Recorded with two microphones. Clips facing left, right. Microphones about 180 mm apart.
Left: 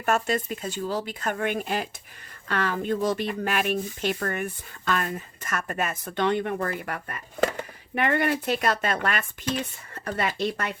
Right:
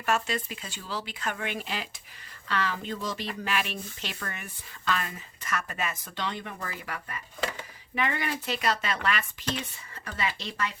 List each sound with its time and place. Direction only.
0.0 s speech: 45° left (ahead or behind)